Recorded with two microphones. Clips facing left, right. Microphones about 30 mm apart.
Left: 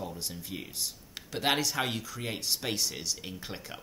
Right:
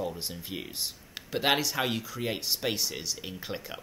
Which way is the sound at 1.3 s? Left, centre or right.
Centre.